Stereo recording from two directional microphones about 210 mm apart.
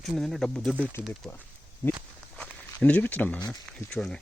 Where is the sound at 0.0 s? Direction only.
Centre (ahead or behind).